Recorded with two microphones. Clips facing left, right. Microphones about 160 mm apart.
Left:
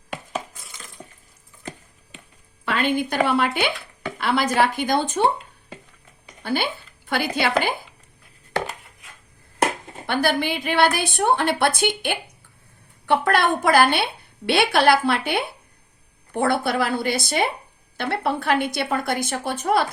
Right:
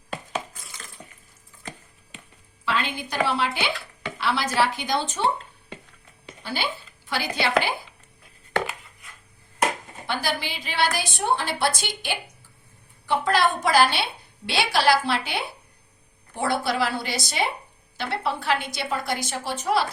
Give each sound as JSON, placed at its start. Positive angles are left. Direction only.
{"t": 2.6, "sound": "speech", "side_deg": 55}
{"t": 6.4, "sound": "a woman's voice", "side_deg": 55}
{"t": 10.1, "sound": "a woman's voice", "side_deg": 55}